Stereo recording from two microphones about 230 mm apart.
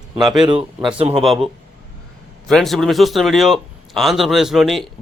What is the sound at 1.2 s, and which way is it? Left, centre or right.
Speech, centre.